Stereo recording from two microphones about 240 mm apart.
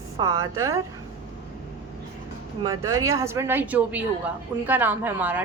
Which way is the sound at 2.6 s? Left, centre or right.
Centre.